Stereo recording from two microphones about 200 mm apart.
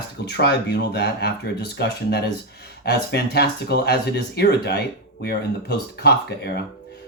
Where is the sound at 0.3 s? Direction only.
55° left (ahead or behind).